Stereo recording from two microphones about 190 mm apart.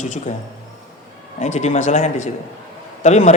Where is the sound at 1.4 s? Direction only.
40° left (ahead or behind).